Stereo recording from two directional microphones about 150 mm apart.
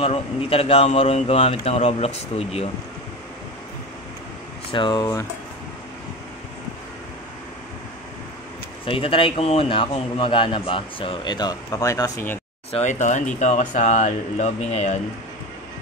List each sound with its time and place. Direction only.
0.0 s a man's voice: 40° left (ahead or behind)
4.7 s a man's voice: 30° left (ahead or behind)
8.8 s a man's voice: 35° left (ahead or behind); by 12.4 s 20° left (ahead or behind)
12.7 s a man's voice: 55° left (ahead or behind)